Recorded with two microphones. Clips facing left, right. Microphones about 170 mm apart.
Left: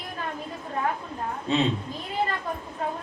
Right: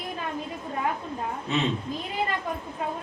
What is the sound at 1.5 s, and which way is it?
Speech, 30° left (ahead or behind).